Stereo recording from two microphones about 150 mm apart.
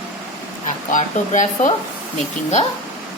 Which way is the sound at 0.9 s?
55° left (ahead or behind).